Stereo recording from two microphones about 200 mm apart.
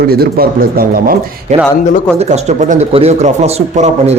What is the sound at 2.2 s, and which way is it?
Speech, 35° right (ahead or behind).